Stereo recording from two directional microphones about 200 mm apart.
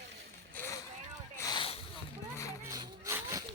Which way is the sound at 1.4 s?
20° left (ahead or behind).